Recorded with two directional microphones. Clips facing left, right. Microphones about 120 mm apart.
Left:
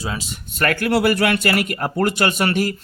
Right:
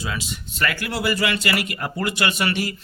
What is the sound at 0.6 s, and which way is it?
Speech, 50° left (ahead or behind).